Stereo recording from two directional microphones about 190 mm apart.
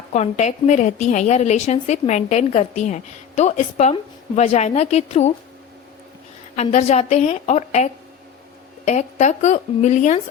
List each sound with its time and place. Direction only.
0.1 s a woman's voice: 40° left (ahead or behind)
6.6 s a woman's voice: 35° left (ahead or behind)